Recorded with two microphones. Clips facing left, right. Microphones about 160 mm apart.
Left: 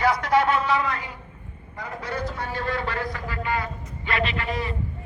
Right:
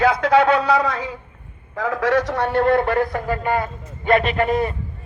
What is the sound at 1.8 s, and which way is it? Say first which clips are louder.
A man's voice: right 12 dB; 90° right.